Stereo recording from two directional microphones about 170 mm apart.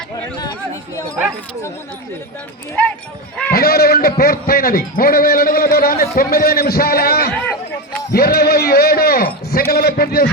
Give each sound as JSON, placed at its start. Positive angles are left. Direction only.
{"t": 3.5, "sound": "a man's voice", "side_deg": 65}